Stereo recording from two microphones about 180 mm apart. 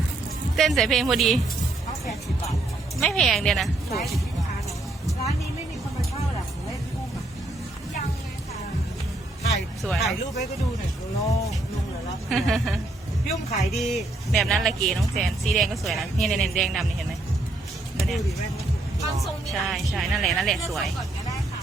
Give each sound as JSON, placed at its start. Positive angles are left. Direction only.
{"t": 0.5, "sound": "speech", "side_deg": 0}
{"t": 3.0, "sound": "a woman's voice", "side_deg": 0}
{"t": 9.8, "sound": "speech", "side_deg": 0}
{"t": 11.2, "sound": "speech", "side_deg": 20}
{"t": 12.3, "sound": "speech", "side_deg": 0}
{"t": 18.0, "sound": "speech", "side_deg": 0}